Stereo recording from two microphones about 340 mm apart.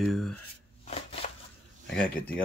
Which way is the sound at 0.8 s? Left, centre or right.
Centre.